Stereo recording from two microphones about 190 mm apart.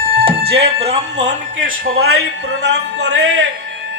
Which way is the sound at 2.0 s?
60° right (ahead or behind).